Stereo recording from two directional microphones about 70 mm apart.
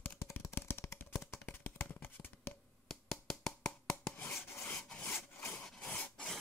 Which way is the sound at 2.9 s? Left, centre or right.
Centre.